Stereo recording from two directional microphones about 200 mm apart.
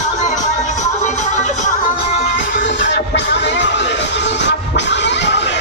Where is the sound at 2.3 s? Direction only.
65° left (ahead or behind).